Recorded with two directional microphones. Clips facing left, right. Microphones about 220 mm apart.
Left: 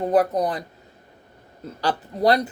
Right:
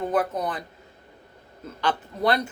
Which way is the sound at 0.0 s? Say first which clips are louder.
Left 5 dB; 35° left (ahead or behind).